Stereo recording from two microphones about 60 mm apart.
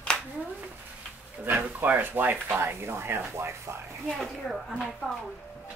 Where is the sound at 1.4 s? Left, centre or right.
Right.